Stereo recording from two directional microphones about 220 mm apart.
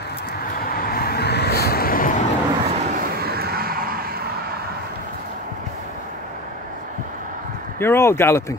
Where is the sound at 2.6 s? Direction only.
30° right (ahead or behind).